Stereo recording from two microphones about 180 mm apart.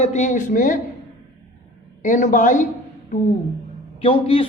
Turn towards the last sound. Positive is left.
turn(degrees=30)  # may be behind; listen again after turning